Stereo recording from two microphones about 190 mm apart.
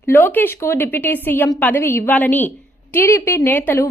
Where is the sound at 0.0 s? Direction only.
10° left (ahead or behind).